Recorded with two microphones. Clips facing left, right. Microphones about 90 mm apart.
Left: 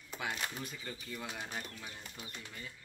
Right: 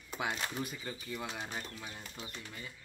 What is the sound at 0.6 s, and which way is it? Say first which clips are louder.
Speech: right 4 dB; 10° right (ahead or behind).